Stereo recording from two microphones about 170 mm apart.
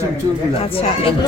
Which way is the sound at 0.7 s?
35° left (ahead or behind).